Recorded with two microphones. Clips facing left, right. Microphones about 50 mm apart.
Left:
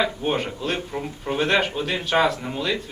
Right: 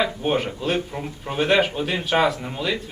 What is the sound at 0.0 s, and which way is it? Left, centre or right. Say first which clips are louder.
Speech: right 1 dB; centre.